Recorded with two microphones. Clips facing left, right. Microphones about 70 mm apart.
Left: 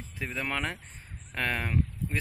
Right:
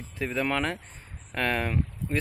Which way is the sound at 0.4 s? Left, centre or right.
Centre.